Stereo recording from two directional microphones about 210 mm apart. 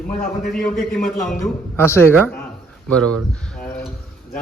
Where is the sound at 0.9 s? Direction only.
Centre (ahead or behind).